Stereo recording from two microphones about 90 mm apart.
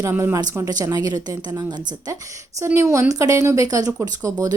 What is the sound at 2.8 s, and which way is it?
A woman's voice, 35° right (ahead or behind).